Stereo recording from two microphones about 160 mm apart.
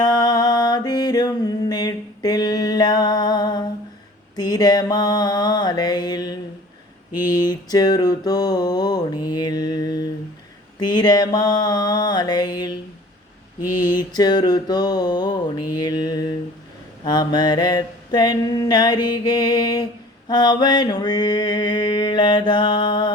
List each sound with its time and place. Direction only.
0.0 s music: 25° left (ahead or behind)
4.4 s mantra: 25° left (ahead or behind)
13.8 s mantra: 25° left (ahead or behind)